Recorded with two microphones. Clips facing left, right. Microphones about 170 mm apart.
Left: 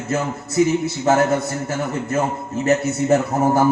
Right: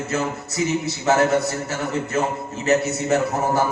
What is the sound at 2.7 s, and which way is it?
Speech, 50° left (ahead or behind).